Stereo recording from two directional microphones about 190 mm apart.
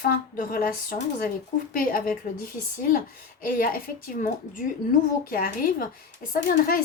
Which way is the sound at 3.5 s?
50° left (ahead or behind).